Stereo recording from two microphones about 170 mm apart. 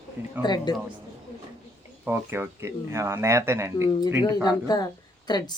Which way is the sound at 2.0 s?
15° right (ahead or behind).